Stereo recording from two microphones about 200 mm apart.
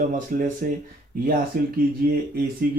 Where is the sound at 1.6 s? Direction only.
45° right (ahead or behind).